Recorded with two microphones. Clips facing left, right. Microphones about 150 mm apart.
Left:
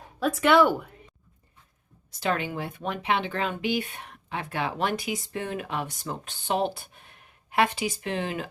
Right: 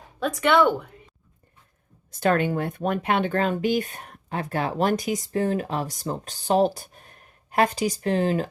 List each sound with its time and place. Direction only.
0.2 s speech: centre (ahead or behind)
2.0 s speech: 50° right (ahead or behind)